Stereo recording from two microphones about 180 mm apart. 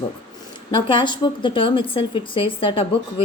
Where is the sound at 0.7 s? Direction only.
25° left (ahead or behind).